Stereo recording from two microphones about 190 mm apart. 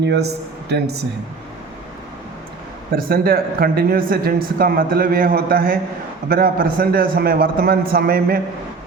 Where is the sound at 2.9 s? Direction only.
50° right (ahead or behind).